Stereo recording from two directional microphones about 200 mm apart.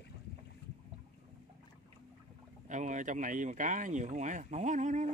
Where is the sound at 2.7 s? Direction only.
40° right (ahead or behind).